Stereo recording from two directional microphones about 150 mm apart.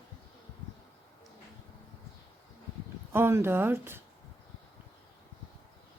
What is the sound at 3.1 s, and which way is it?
Speech, 15° right (ahead or behind).